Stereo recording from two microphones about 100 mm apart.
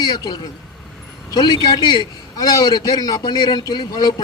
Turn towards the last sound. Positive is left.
turn(degrees=40)  # may be behind; listen again after turning